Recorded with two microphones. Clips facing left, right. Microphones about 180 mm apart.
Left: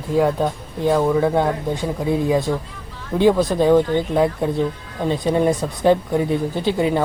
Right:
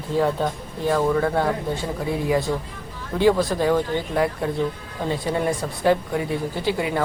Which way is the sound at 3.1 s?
15° left (ahead or behind).